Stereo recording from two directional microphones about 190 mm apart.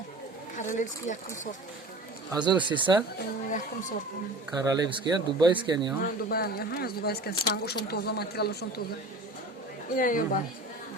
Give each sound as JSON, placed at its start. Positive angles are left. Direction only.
{"t": 0.5, "sound": "speech", "side_deg": 40}
{"t": 2.3, "sound": "speech", "side_deg": -20}
{"t": 4.5, "sound": "speech", "side_deg": -20}
{"t": 6.0, "sound": "speech", "side_deg": 55}
{"t": 9.9, "sound": "speech", "side_deg": 45}